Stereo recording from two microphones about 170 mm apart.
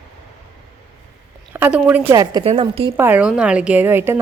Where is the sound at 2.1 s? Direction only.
20° right (ahead or behind).